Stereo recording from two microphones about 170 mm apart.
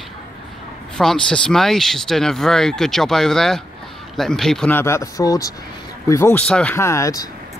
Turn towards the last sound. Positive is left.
turn(degrees=20)  # may be behind; listen again after turning